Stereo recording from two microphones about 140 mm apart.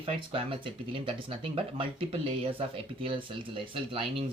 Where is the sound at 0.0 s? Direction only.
40° right (ahead or behind).